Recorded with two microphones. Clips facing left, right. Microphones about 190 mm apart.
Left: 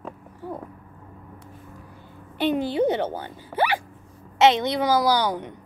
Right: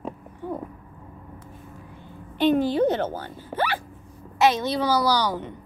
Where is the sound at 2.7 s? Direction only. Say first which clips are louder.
Even; 15° left (ahead or behind).